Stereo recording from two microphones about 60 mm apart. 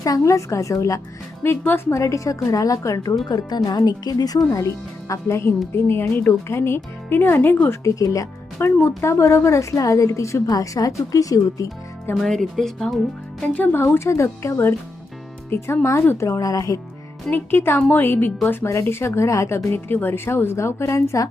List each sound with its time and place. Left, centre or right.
0.0 s a woman's voice: left
1.6 s speech: left
1.9 s a woman's voice: left
3.2 s speech: left
4.5 s speech: left
5.7 s speech: left
7.7 s speech: left
9.0 s a woman's voice: left
12.1 s speech: centre
13.4 s speech: left
13.7 s speech: left
16.4 s speech: left
17.3 s speech: left
18.6 s speech: left